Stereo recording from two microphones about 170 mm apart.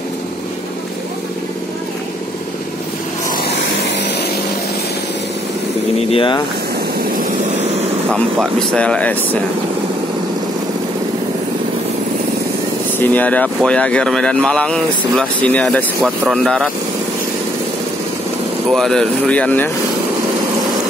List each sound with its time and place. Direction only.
5.9 s speech: 35° left (ahead or behind)
8.1 s speech: 5° left (ahead or behind)
13.1 s speech: 10° left (ahead or behind)
18.7 s speech: centre (ahead or behind)